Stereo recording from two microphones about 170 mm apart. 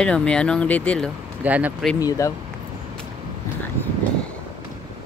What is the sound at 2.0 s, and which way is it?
Speech, 20° left (ahead or behind).